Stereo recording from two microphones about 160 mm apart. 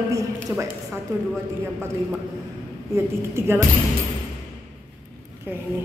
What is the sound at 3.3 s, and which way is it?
Speech, 15° right (ahead or behind).